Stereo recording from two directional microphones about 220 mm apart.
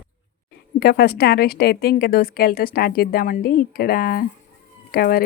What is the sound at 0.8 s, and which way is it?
A woman's voice, 45° left (ahead or behind).